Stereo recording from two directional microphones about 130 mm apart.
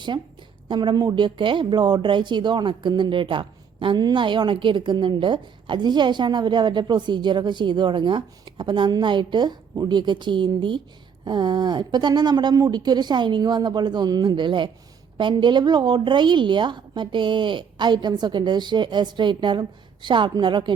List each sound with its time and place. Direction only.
0.7 s speech: 35° right (ahead or behind)